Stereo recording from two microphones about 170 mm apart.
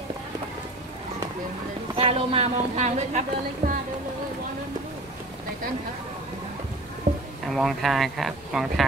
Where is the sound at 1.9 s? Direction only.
35° right (ahead or behind).